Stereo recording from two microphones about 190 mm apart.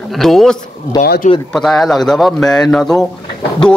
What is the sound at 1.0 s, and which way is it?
Speech, 50° left (ahead or behind).